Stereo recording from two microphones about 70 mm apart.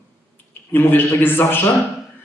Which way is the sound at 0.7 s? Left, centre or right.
Left.